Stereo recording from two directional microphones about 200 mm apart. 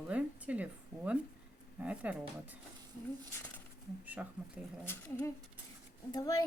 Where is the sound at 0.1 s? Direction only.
5° right (ahead or behind).